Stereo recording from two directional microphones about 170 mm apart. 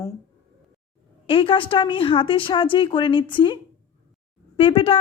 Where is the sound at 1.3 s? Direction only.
30° left (ahead or behind).